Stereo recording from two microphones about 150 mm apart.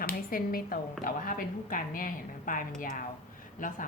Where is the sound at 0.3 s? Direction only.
70° left (ahead or behind).